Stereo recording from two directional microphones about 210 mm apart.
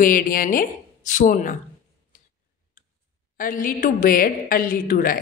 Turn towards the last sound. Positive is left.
turn(degrees=45)  # may be behind; listen again after turning